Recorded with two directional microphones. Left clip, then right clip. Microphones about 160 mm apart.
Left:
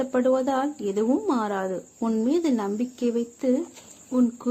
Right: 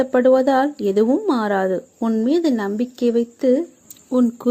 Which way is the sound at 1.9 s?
20° right (ahead or behind).